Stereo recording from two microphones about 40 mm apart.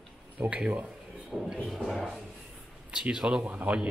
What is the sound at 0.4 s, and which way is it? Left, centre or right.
Speech, right.